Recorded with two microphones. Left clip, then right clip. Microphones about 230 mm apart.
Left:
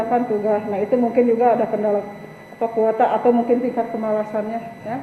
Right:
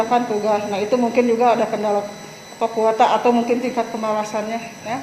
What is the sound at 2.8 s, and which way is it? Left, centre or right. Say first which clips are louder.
Speech: right 1 dB; right.